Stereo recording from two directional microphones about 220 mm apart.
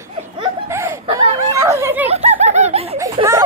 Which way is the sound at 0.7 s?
10° right (ahead or behind).